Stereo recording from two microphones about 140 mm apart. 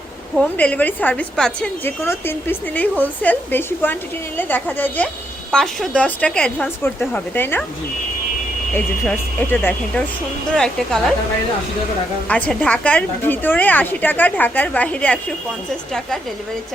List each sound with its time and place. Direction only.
0.3 s a woman's voice: 10° left (ahead or behind)
8.7 s a woman's voice: 15° left (ahead or behind)
12.3 s a woman's voice: 10° left (ahead or behind)